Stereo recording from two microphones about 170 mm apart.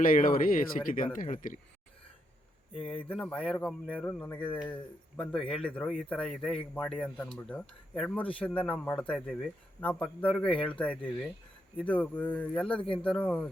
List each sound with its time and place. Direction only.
0.0 s speech: 55° left (ahead or behind)
3.1 s a man's voice: 5° left (ahead or behind)